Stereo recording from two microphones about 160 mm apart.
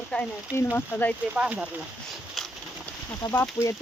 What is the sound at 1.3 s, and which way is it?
Speech, 10° right (ahead or behind).